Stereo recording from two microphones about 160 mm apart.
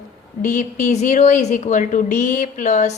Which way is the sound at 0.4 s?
50° left (ahead or behind).